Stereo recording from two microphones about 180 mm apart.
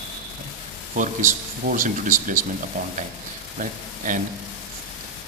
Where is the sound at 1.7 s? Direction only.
50° right (ahead or behind).